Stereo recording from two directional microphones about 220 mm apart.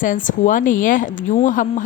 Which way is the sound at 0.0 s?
35° left (ahead or behind).